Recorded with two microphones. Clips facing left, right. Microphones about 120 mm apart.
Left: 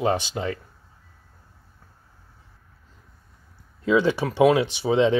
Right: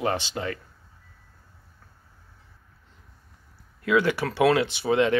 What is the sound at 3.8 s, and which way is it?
Speech, 20° left (ahead or behind).